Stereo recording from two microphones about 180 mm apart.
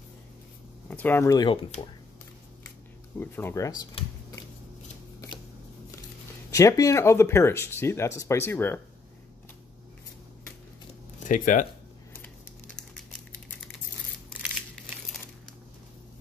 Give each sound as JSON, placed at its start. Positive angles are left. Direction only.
{"t": 0.8, "sound": "speech", "side_deg": 10}
{"t": 3.2, "sound": "speech", "side_deg": 10}
{"t": 6.5, "sound": "speech", "side_deg": 20}
{"t": 11.2, "sound": "speech", "side_deg": 45}
{"t": 12.7, "sound": "a sound", "side_deg": 5}